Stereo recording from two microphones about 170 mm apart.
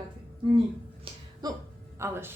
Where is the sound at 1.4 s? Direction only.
25° right (ahead or behind).